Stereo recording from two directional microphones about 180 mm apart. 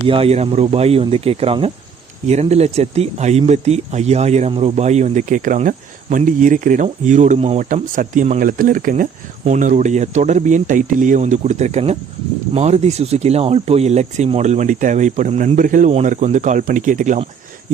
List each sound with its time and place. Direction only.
0.1 s speech: 35° right (ahead or behind)